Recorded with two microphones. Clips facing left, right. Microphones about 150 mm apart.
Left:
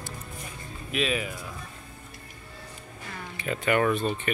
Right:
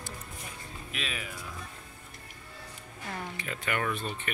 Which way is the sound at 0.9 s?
15° left (ahead or behind).